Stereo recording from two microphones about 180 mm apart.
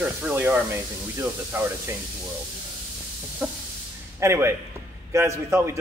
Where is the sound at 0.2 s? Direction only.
10° right (ahead or behind).